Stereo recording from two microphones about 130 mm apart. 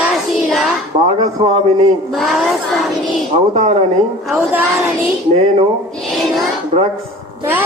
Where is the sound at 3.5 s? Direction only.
60° right (ahead or behind).